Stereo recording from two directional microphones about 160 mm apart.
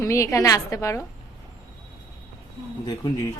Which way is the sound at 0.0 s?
20° left (ahead or behind).